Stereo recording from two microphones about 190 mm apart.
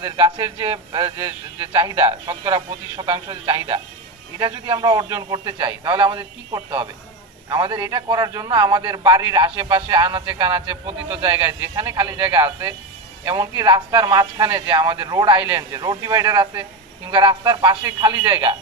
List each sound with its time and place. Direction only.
0.0 s a man's voice: 15° right (ahead or behind)